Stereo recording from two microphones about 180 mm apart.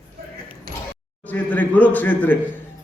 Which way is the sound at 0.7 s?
55° right (ahead or behind).